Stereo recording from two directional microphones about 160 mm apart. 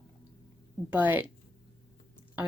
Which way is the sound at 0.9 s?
10° right (ahead or behind).